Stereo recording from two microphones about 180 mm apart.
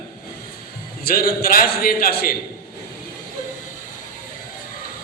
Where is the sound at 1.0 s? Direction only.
55° left (ahead or behind).